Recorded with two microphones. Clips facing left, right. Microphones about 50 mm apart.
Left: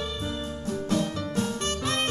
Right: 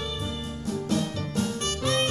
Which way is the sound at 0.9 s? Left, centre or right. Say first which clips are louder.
Left 2 dB; left.